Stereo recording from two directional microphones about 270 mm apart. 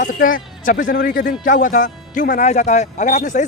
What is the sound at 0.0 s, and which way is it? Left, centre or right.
A man's voice, left.